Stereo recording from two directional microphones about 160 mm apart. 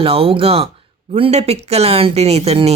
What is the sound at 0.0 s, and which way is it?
Speech, 35° right (ahead or behind).